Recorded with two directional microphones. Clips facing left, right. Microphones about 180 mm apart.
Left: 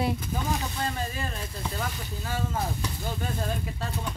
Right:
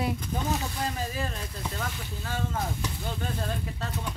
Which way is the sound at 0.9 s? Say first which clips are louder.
Even; centre (ahead or behind).